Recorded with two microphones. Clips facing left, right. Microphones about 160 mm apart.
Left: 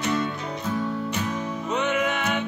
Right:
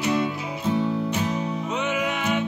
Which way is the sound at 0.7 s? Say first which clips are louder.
Right 4 dB; 30° right (ahead or behind).